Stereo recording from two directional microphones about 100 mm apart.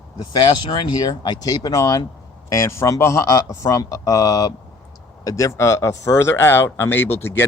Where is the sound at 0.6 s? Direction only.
50° left (ahead or behind); by 7.5 s 20° left (ahead or behind).